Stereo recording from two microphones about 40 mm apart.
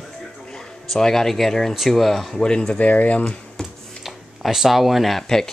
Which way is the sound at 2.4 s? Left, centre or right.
Centre.